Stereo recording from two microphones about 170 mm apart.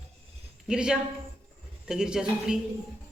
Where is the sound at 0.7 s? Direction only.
5° right (ahead or behind).